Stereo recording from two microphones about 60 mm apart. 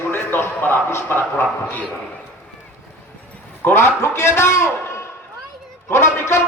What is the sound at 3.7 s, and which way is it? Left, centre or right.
Speech, left.